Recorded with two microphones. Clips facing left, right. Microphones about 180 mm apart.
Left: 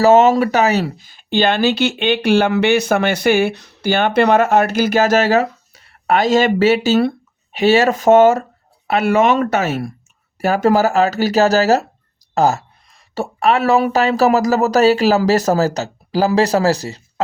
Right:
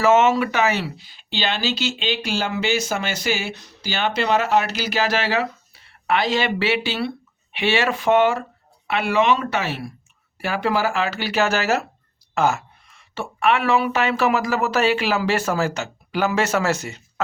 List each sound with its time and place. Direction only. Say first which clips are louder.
0.0 s speech: left 6 dB; 35° left (ahead or behind)